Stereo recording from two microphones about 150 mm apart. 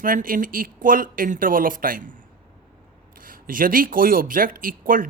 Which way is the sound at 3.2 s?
70° right (ahead or behind).